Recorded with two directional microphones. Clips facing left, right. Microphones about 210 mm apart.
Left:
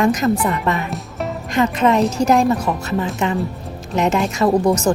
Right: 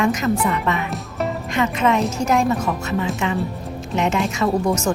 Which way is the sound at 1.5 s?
35° left (ahead or behind).